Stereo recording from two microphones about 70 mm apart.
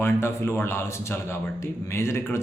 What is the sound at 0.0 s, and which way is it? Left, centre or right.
A man's voice, left.